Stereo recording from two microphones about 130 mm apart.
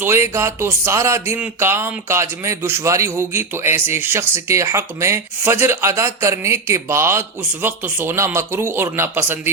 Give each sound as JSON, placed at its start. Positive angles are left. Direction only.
{"t": 0.0, "sound": "a man's voice", "side_deg": -20}